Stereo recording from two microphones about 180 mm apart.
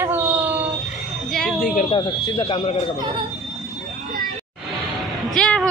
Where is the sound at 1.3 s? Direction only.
Centre (ahead or behind).